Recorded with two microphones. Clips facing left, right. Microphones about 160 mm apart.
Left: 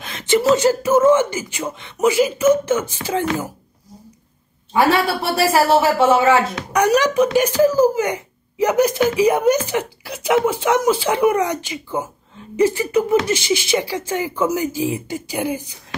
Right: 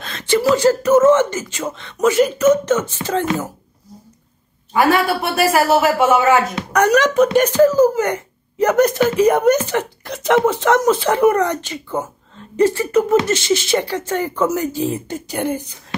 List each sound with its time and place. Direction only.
0.0 s a sound: 15° left (ahead or behind)
0.4 s speech: 25° left (ahead or behind)
0.9 s speech: 10° left (ahead or behind)
5.2 s speech: 30° left (ahead or behind)
6.7 s speech: 10° left (ahead or behind)